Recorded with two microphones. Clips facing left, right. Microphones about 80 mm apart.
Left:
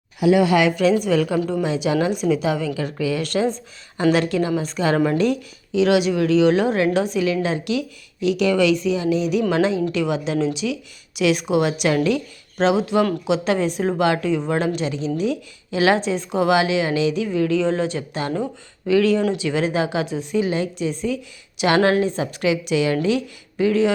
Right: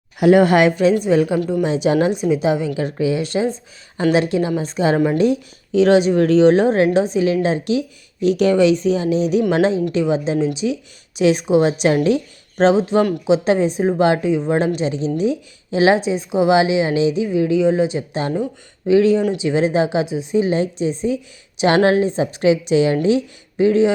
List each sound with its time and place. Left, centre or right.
0.2 s speech: right
1.0 s speech: right
2.1 s speech: centre
5.7 s speech: right